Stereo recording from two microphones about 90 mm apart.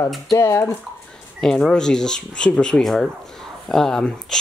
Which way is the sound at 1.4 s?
5° left (ahead or behind).